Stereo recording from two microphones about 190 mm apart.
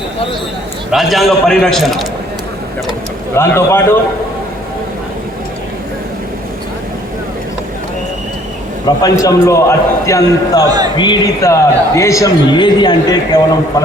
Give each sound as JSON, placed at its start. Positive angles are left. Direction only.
{"t": 0.9, "sound": "a man's voice", "side_deg": 0}
{"t": 3.3, "sound": "a man's voice", "side_deg": 15}
{"t": 9.0, "sound": "a man's voice", "side_deg": 20}